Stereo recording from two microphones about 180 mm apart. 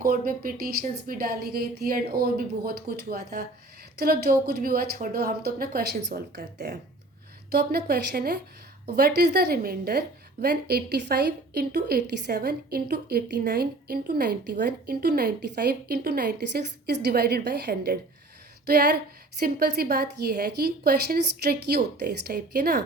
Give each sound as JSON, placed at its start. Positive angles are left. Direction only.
{"t": 0.0, "sound": "a woman's voice", "side_deg": -55}